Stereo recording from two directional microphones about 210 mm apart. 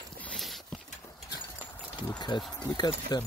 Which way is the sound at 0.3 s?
Centre (ahead or behind).